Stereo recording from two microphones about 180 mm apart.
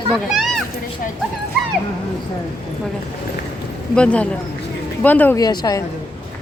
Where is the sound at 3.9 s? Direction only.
5° left (ahead or behind).